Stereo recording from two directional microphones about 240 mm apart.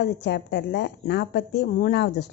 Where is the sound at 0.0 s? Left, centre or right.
Left.